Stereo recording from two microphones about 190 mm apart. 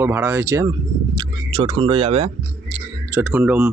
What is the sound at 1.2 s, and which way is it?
Speech, 25° right (ahead or behind).